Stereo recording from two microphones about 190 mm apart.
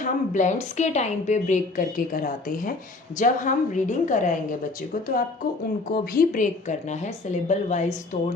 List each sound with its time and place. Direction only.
0.0 s a woman's voice: 40° left (ahead or behind)
5.9 s a woman's voice: 45° left (ahead or behind)